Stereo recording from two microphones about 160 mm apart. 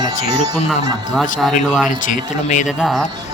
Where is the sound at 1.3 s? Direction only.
Centre (ahead or behind).